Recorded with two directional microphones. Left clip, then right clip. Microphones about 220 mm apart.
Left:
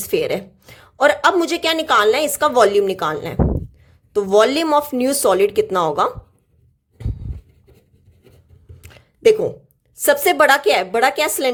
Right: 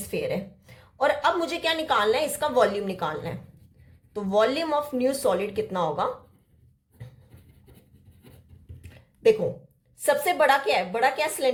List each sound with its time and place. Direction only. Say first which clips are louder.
0.1 s a woman's voice: left 9 dB; 45° left (ahead or behind)
8.8 s a sound: left 7 dB; 40° left (ahead or behind)
10.0 s a woman's voice: left 8 dB; 40° left (ahead or behind)